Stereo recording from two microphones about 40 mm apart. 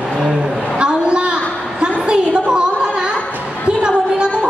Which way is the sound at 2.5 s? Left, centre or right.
Right.